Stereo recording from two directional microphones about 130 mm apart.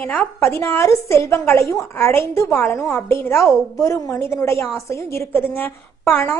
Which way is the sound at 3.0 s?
20° left (ahead or behind).